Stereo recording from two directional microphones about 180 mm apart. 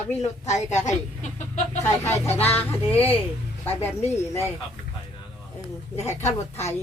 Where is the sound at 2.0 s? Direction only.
15° left (ahead or behind).